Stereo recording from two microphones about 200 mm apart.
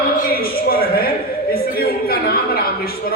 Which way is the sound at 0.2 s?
50° left (ahead or behind).